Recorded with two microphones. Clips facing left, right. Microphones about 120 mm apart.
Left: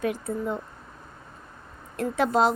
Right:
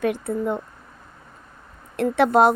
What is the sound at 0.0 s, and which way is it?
Speech, 65° right (ahead or behind).